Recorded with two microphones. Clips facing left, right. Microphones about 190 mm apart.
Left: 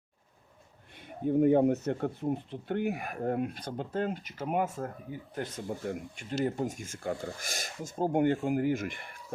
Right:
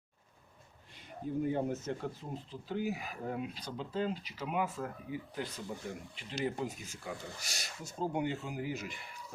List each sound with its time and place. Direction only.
1.0 s speech: 60° left (ahead or behind)